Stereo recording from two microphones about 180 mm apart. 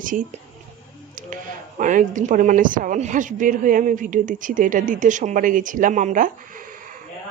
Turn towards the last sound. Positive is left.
turn(degrees=-45)  # may be behind; listen again after turning